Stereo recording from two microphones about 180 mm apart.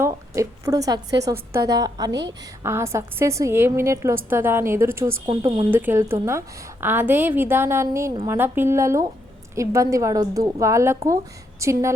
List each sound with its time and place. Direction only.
0.0 s a sound: 15° right (ahead or behind)
1.2 s a woman's voice: 15° right (ahead or behind)
5.7 s a woman's voice: 10° right (ahead or behind)